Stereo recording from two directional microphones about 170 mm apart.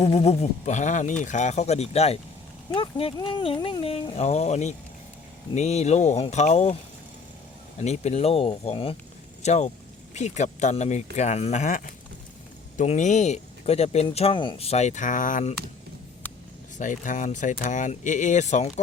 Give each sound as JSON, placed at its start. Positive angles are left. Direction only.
{"t": 0.0, "sound": "speech", "side_deg": 35}
{"t": 7.8, "sound": "speech", "side_deg": 40}
{"t": 16.7, "sound": "speech", "side_deg": 45}